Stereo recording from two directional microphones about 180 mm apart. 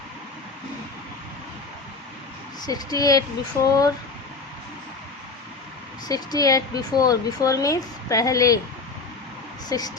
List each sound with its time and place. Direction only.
2.6 s speech: 20° left (ahead or behind)
6.1 s speech: 20° left (ahead or behind)
9.6 s speech: 20° left (ahead or behind)